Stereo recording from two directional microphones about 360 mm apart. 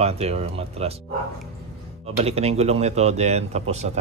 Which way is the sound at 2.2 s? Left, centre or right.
Centre.